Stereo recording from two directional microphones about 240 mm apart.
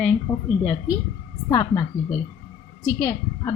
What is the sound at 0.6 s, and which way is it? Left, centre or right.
A woman's voice, centre.